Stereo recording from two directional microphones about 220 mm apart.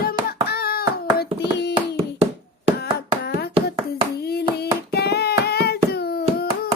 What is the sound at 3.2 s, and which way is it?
Hands, 45° left (ahead or behind).